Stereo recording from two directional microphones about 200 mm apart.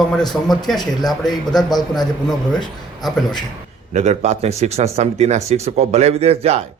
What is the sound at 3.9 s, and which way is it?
Speech, 35° right (ahead or behind).